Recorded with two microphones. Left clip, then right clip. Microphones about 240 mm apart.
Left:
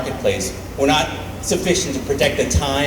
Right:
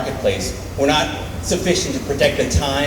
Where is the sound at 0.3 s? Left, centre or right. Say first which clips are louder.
Even; left.